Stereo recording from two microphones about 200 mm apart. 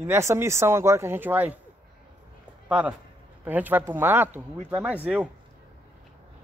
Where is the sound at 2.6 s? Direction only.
5° right (ahead or behind).